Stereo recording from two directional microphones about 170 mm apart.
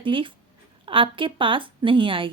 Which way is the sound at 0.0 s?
30° right (ahead or behind).